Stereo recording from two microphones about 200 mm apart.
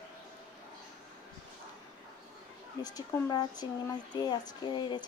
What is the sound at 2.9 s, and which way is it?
Speech, 15° left (ahead or behind).